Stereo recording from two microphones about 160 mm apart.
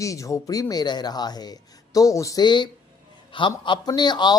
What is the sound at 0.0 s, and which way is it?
Speech, 20° left (ahead or behind).